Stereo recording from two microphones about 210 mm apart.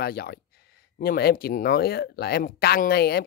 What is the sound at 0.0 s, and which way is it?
Speech, 50° left (ahead or behind).